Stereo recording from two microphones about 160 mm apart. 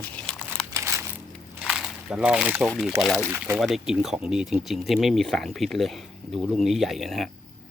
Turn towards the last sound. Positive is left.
turn(degrees=0)  # may be behind; listen again after turning